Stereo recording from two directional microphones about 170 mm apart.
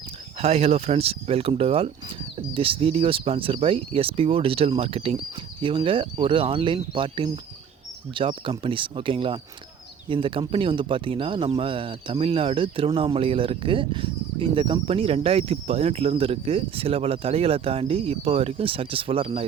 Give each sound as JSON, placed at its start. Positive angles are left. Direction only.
{"t": 0.3, "sound": "speech", "side_deg": -35}